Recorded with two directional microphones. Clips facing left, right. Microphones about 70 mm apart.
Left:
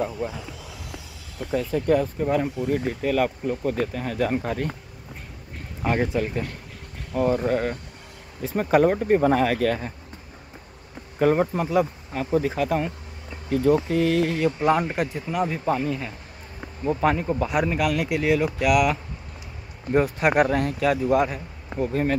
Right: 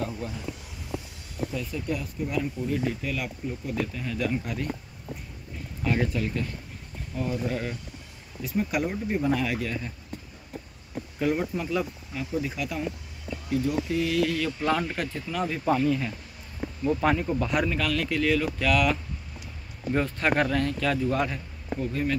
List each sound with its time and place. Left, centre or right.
0.0 s speech: left
1.5 s speech: left
5.8 s speech: left
7.1 s speech: left
11.1 s speech: left; by 17.6 s centre
17.6 s speech: centre
21.7 s speech: left